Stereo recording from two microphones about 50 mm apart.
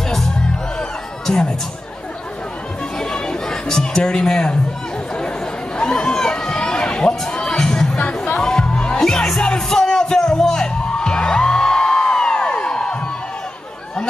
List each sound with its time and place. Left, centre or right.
0.7 s music: centre
3.0 s chatter: centre
5.8 s run: centre
8.4 s music: centre